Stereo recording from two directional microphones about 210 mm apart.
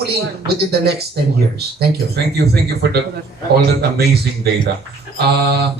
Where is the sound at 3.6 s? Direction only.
50° right (ahead or behind).